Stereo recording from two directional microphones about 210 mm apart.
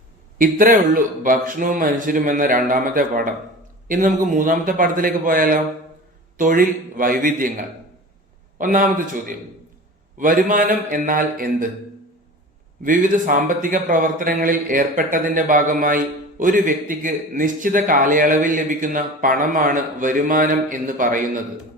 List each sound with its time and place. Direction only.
0.3 s speech: 40° right (ahead or behind)
12.8 s speech: 40° right (ahead or behind)